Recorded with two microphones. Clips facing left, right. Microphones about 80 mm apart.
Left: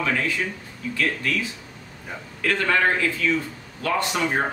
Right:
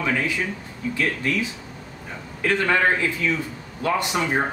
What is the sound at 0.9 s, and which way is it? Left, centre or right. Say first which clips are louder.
A man's voice: right 1 dB; right.